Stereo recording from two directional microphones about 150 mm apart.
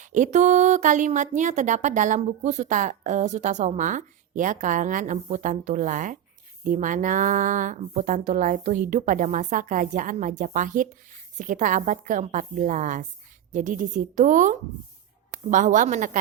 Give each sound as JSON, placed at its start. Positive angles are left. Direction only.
{"t": 0.0, "sound": "a woman's voice", "side_deg": -55}